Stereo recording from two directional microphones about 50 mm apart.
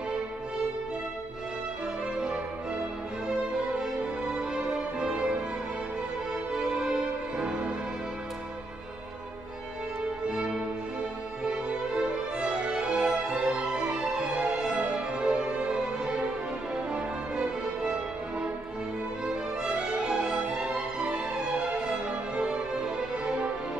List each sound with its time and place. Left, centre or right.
4.0 s music: centre
6.5 s music: centre
10.3 s music: centre
19.2 s music: centre
20.3 s music: right
22.8 s music: centre